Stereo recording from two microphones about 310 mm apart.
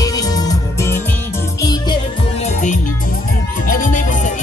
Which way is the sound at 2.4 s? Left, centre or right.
Left.